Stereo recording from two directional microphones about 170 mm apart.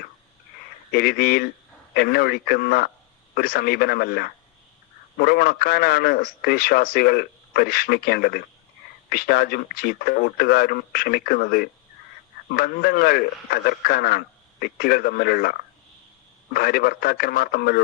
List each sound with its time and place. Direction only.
0.9 s a man's voice: 60° left (ahead or behind)